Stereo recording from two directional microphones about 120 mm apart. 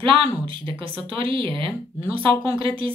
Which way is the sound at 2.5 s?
50° right (ahead or behind).